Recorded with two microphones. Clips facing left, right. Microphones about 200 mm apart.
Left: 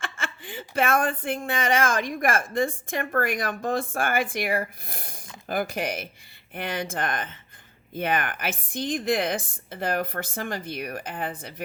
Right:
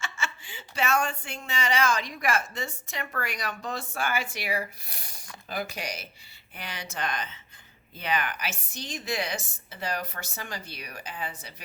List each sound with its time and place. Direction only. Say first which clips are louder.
0.0 s speech: left 2 dB; 55° left (ahead or behind)